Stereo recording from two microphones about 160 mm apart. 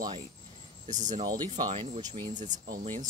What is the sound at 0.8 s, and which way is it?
Speech, 50° right (ahead or behind).